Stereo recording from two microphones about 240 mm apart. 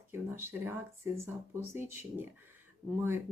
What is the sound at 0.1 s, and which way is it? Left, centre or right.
Speech, centre.